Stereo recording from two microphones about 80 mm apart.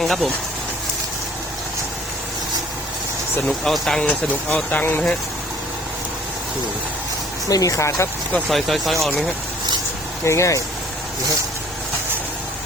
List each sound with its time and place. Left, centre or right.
0.0 s speech: centre
3.4 s speech: centre
4.4 s speech: centre
7.4 s speech: left
8.4 s speech: centre
10.2 s speech: left